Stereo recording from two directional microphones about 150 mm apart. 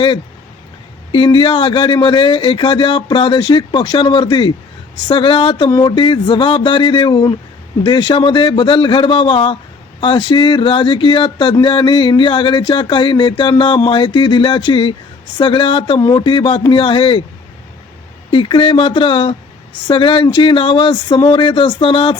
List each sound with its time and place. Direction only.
1.1 s speech: 35° left (ahead or behind)
18.3 s speech: 35° left (ahead or behind)